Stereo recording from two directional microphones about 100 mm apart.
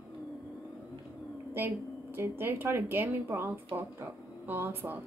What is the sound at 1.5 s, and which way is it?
A woman's voice, 20° right (ahead or behind).